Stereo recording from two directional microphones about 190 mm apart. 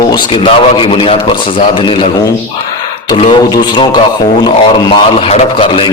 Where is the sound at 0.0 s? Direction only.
25° left (ahead or behind).